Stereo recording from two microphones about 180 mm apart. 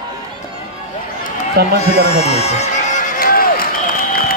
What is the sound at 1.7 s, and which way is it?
Run, 35° left (ahead or behind).